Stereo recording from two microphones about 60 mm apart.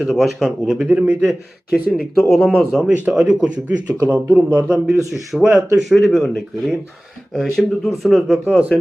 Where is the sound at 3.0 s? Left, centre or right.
Centre.